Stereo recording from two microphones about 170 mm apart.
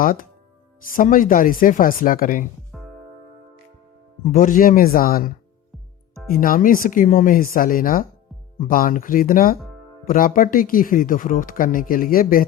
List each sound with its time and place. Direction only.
0.0 s speech: 55° left (ahead or behind)
2.7 s music: centre (ahead or behind)
4.3 s speech: 55° left (ahead or behind)
6.3 s speech: 55° left (ahead or behind)